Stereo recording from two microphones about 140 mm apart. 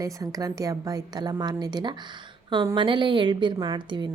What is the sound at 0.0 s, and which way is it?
A woman's voice, 25° right (ahead or behind).